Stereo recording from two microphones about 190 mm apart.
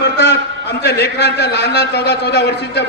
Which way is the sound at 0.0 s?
60° left (ahead or behind).